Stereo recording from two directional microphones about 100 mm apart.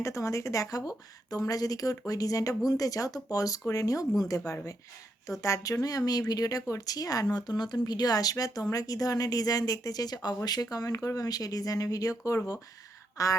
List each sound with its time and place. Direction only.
0.0 s speech: 30° left (ahead or behind)